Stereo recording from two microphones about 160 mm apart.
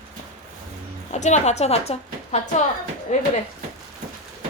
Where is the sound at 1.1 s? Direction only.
45° left (ahead or behind).